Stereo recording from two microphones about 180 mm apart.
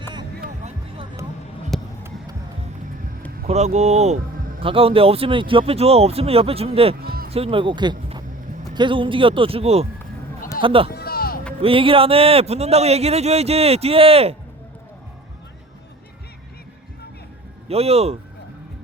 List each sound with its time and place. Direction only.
1.7 s a sound: centre (ahead or behind)
3.4 s speech: 40° right (ahead or behind)
7.0 s speech: 55° right (ahead or behind)
7.3 s speech: 35° right (ahead or behind)
10.8 s a sound: 60° left (ahead or behind)
11.6 s speech: 30° right (ahead or behind)
17.7 s speech: 35° right (ahead or behind)